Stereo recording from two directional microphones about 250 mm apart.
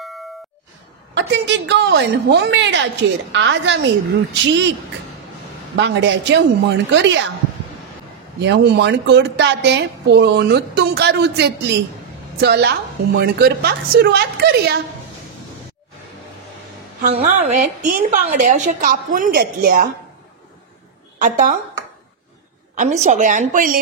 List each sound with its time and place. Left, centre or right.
1.1 s a woman's voice: right
5.8 s a woman's voice: right
8.4 s a woman's voice: right
17.1 s a woman's voice: right
21.2 s a woman's voice: right
22.8 s a woman's voice: right